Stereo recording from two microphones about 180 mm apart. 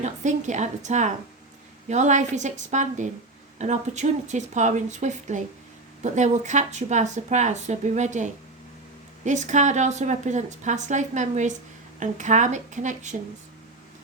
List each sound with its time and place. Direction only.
0.0 s speech: 40° right (ahead or behind)